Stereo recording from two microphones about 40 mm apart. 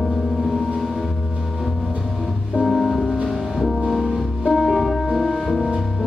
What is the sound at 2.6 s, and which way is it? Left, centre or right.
Music, centre.